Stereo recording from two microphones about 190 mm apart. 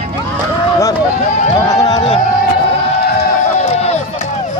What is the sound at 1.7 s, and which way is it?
Music, 20° left (ahead or behind).